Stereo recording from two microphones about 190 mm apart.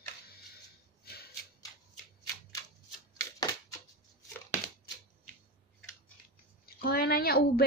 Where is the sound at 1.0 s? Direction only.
55° left (ahead or behind).